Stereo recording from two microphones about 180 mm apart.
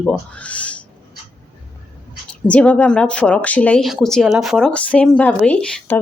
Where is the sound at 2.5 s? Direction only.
10° left (ahead or behind).